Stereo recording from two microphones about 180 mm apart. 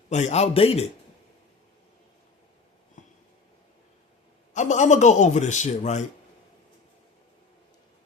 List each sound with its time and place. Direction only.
0.1 s a man's voice: 40° left (ahead or behind)
3.0 s a sound: 45° left (ahead or behind)
4.5 s a man's voice: 40° left (ahead or behind)